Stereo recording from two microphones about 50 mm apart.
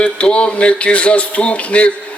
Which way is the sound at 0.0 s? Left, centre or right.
Centre.